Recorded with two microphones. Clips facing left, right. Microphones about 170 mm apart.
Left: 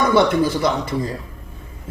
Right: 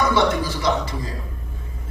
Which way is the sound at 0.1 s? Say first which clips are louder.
Left 4 dB; 55° left (ahead or behind).